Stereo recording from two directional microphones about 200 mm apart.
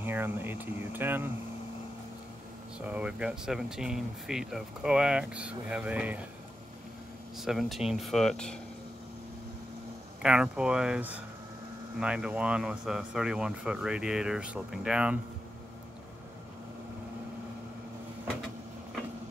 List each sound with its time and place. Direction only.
0.0 s speech: 10° right (ahead or behind)
2.8 s speech: 5° right (ahead or behind)
7.3 s speech: centre (ahead or behind)
10.2 s speech: 5° right (ahead or behind)